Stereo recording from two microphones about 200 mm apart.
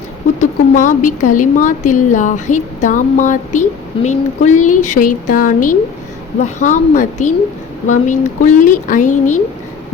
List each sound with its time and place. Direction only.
0.3 s a woman's voice: 40° left (ahead or behind)